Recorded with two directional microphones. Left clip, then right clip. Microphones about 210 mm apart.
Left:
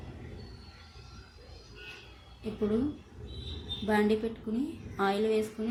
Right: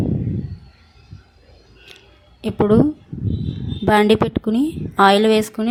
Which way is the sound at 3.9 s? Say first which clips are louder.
Right 14 dB; 50° right (ahead or behind).